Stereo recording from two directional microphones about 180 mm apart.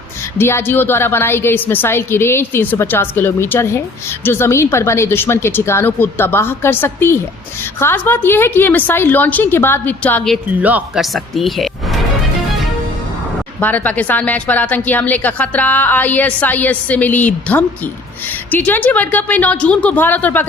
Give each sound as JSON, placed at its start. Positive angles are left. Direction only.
{"t": 0.3, "sound": "a woman's voice", "side_deg": 15}
{"t": 10.6, "sound": "speech", "side_deg": -10}
{"t": 13.6, "sound": "a woman's voice", "side_deg": 10}